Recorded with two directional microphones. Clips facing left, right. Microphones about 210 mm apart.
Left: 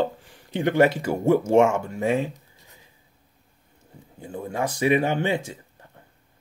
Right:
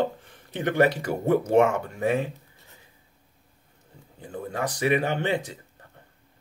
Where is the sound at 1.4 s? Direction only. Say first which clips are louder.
Left 1 dB; 25° left (ahead or behind).